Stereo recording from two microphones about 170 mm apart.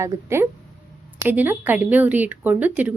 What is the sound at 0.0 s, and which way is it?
Speech, 15° right (ahead or behind).